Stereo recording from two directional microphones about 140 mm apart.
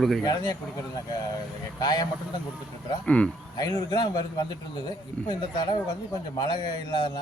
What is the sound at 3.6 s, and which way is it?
A man's voice, 30° left (ahead or behind).